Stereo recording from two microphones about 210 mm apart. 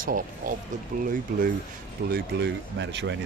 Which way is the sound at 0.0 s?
40° right (ahead or behind).